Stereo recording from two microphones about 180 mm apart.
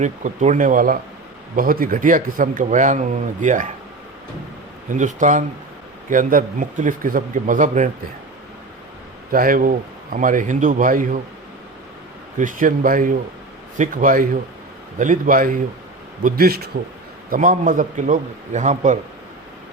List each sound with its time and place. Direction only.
0.0 s speech: 45° right (ahead or behind)
4.9 s speech: 45° right (ahead or behind)
9.3 s speech: 50° right (ahead or behind)
12.4 s a man's voice: 45° right (ahead or behind)